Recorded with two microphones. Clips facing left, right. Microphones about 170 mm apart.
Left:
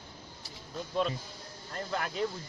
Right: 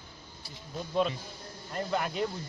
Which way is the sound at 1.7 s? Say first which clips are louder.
Right 4 dB; 5° right (ahead or behind).